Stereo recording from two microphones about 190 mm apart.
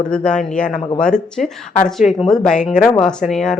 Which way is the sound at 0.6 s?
40° left (ahead or behind).